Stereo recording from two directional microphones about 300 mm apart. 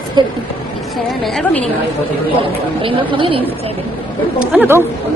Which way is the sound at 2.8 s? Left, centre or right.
Centre.